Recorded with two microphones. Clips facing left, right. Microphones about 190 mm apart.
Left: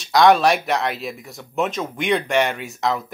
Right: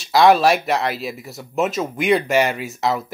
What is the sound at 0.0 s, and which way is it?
Speech, centre (ahead or behind).